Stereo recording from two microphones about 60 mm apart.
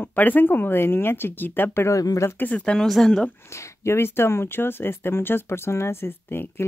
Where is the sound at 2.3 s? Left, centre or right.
Left.